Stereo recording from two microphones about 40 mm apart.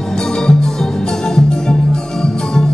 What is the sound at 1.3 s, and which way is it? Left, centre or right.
Music, centre.